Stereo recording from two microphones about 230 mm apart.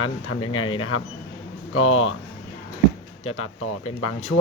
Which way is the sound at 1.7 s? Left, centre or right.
Left.